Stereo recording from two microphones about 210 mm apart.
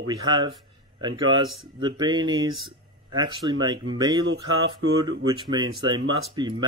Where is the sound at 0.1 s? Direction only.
20° right (ahead or behind).